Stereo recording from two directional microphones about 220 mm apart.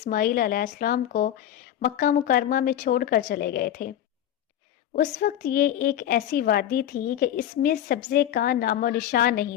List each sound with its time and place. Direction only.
0.0 s a woman's voice: 40° left (ahead or behind)
4.9 s a woman's voice: 40° left (ahead or behind)